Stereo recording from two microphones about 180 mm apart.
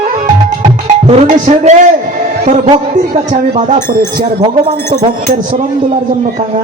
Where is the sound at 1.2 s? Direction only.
45° right (ahead or behind).